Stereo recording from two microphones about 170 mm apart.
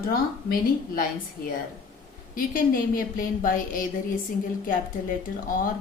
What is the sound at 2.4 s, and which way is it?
A woman's voice, 55° left (ahead or behind).